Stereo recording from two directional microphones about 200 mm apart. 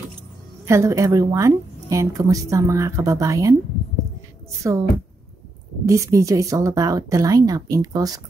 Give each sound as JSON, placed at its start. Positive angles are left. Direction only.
{"t": 0.7, "sound": "a woman's voice", "side_deg": -15}
{"t": 4.6, "sound": "a woman's voice", "side_deg": -15}
{"t": 5.9, "sound": "a woman's voice", "side_deg": -15}